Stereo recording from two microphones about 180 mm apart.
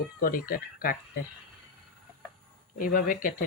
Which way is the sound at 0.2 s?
55° left (ahead or behind).